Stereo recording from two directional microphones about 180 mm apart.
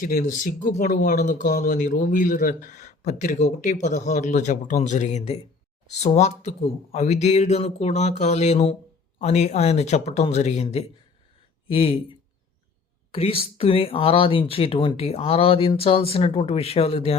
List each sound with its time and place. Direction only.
0.0 s speech: 45° left (ahead or behind)
13.1 s speech: 30° left (ahead or behind)